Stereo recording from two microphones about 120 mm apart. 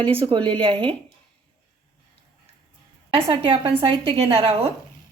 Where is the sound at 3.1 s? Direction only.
50° right (ahead or behind).